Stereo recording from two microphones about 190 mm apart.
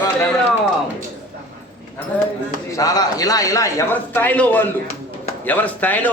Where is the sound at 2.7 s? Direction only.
20° left (ahead or behind).